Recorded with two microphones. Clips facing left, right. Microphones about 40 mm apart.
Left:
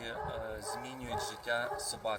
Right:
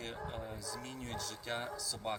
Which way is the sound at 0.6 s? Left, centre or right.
Centre.